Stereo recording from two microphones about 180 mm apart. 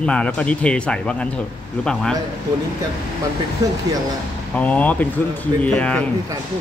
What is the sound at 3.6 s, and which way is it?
Speech, 20° right (ahead or behind).